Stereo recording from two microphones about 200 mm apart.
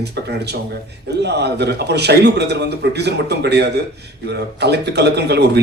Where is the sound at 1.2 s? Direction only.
55° right (ahead or behind).